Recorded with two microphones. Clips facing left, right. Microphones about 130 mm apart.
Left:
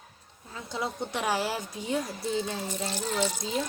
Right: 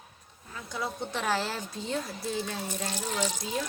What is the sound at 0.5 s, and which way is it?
A woman's voice, 20° left (ahead or behind).